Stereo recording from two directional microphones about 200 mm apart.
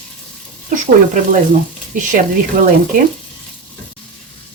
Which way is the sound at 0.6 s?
40° right (ahead or behind).